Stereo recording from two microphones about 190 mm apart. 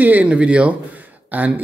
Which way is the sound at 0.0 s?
10° right (ahead or behind).